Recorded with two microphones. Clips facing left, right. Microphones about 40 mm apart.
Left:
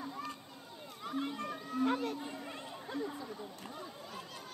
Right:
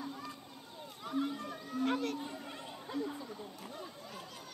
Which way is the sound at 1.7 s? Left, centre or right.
Left.